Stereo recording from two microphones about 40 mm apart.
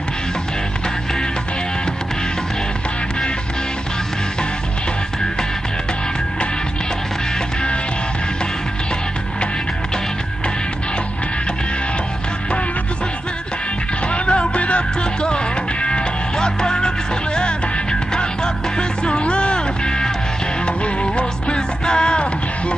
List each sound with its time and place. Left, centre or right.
14.0 s music: left
18.1 s music: left